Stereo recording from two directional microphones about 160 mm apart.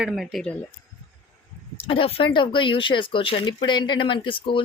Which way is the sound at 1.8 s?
35° left (ahead or behind).